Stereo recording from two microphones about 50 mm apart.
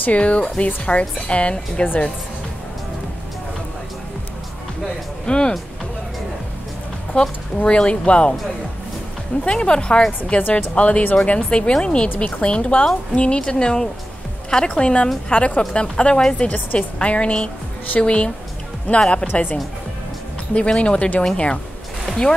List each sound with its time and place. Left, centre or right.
0.0 s speech: left
5.2 s speech: centre
7.2 s speech: centre
9.4 s speech: left
20.5 s speech: left
22.0 s a sound: centre